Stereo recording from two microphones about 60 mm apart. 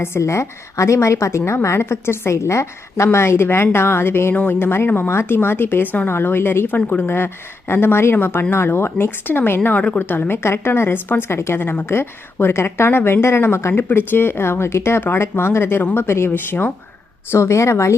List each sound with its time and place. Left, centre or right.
0.0 s a woman's voice: left
6.7 s speech: left
7.7 s speech: left
9.6 s speech: left
10.0 s a woman's voice: left
17.3 s a woman's voice: left